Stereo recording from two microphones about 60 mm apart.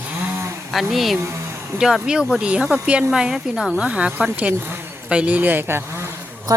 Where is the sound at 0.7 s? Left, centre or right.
Centre.